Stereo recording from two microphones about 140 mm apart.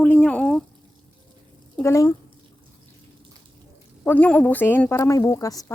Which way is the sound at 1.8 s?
15° left (ahead or behind).